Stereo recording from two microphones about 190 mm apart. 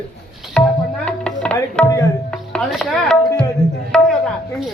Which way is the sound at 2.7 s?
Centre (ahead or behind).